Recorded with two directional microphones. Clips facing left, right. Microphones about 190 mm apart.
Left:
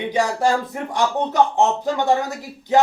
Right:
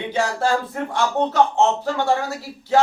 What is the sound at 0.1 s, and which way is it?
Speech, 15° left (ahead or behind).